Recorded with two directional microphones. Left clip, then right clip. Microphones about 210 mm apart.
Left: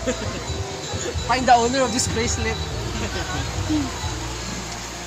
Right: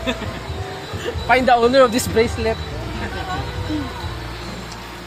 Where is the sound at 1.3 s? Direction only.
40° right (ahead or behind).